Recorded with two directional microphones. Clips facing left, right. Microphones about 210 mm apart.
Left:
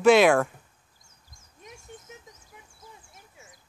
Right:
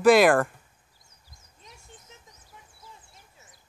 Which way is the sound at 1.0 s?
50° left (ahead or behind).